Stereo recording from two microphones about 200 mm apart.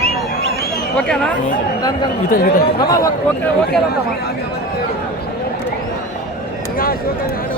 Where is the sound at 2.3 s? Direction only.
45° left (ahead or behind).